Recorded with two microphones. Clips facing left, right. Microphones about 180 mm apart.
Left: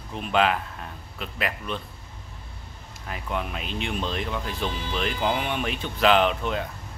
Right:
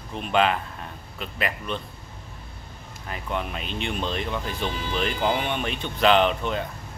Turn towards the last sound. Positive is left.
turn(degrees=0)  # may be behind; listen again after turning